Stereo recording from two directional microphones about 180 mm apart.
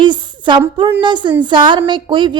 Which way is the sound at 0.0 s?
25° right (ahead or behind).